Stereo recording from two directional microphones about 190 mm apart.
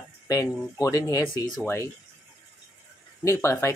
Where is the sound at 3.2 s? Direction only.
15° left (ahead or behind).